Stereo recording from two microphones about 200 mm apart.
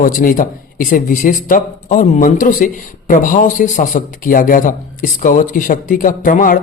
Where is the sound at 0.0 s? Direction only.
45° left (ahead or behind).